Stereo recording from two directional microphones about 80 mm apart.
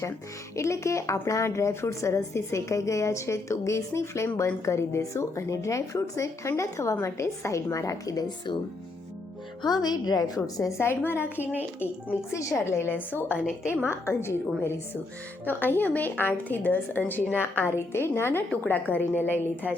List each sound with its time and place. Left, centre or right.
0.5 s a woman's voice: left
9.6 s a woman's voice: left
10.8 s a woman's voice: left
12.4 s a woman's voice: left